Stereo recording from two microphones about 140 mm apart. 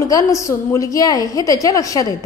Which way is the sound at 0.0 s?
25° left (ahead or behind).